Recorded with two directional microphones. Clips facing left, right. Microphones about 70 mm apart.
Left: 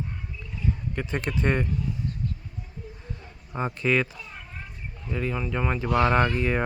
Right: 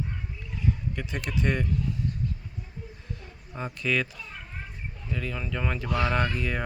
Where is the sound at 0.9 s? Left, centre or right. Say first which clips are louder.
Left 3 dB; left.